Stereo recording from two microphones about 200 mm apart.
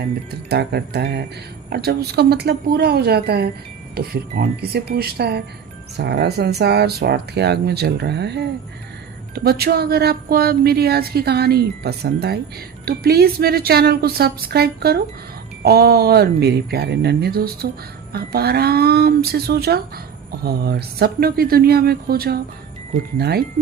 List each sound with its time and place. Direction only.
0.5 s speech: 55° right (ahead or behind)